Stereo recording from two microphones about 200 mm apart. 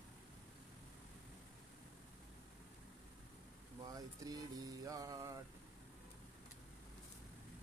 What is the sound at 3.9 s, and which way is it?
Music, 20° right (ahead or behind).